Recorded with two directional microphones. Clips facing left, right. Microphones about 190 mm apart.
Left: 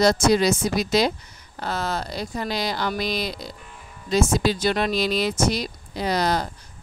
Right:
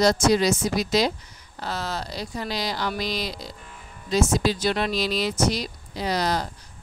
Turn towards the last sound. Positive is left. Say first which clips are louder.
# left 2 dB
turn(degrees=55)  # may be behind; listen again after turning